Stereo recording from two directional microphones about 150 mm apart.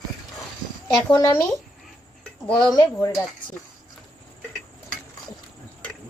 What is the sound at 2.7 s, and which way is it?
Speech, 25° left (ahead or behind).